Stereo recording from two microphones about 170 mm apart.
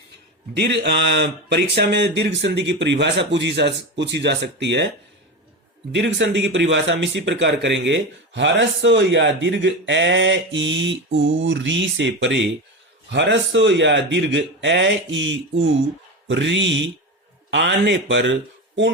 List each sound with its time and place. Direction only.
0.5 s speech: 90° right
5.9 s speech: 90° right